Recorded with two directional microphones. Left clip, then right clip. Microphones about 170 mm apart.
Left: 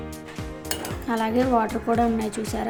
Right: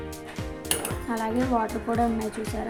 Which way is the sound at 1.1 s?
15° left (ahead or behind).